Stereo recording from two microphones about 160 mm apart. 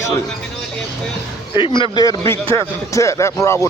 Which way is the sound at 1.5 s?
30° left (ahead or behind).